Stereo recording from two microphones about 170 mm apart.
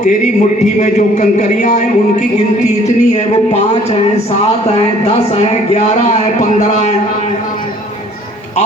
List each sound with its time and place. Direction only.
0.6 s a man's voice: 45° left (ahead or behind)